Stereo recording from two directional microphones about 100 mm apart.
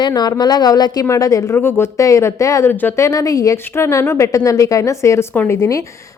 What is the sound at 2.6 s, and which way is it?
Speech, 20° left (ahead or behind).